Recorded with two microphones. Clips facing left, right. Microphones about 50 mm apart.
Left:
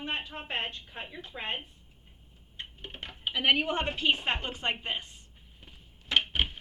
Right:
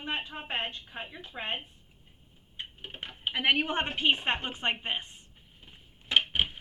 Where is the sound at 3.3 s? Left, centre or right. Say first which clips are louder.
Left 1 dB; right.